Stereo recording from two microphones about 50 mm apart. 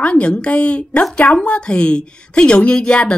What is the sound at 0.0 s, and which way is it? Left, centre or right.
A woman's voice, left.